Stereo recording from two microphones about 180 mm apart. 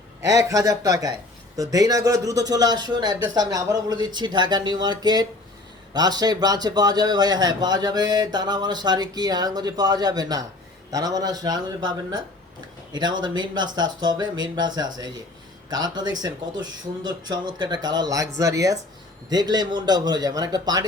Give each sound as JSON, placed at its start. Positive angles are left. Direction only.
{"t": 0.3, "sound": "speech", "side_deg": -20}